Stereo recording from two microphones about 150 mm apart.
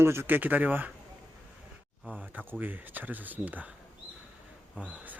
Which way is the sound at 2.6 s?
10° right (ahead or behind).